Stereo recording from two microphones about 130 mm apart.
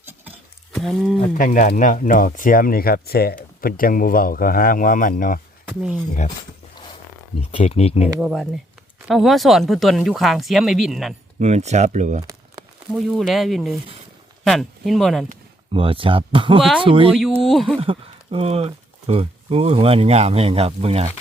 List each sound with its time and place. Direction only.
0.7 s speech: centre (ahead or behind)
1.3 s speech: 80° left
5.6 s speech: 10° right (ahead or behind)
7.5 s speech: 50° left (ahead or behind)
8.2 s speech: 5° right (ahead or behind)
11.3 s speech: 60° right (ahead or behind)
12.9 s speech: centre (ahead or behind)
15.7 s speech: 45° right (ahead or behind)
17.4 s speech: centre (ahead or behind)
17.7 s speech: 45° right (ahead or behind)